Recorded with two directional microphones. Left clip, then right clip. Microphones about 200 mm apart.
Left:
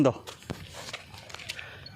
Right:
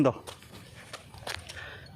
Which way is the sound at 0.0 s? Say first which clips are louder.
Left 1 dB; 10° left (ahead or behind).